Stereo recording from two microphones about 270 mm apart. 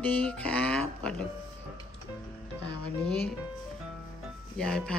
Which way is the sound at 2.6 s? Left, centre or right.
Centre.